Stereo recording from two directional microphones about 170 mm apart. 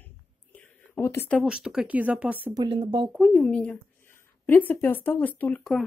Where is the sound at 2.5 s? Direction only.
30° right (ahead or behind).